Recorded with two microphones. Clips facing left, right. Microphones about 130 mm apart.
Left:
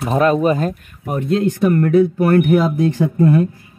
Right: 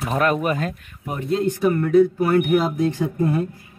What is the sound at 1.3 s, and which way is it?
Speech, 65° left (ahead or behind).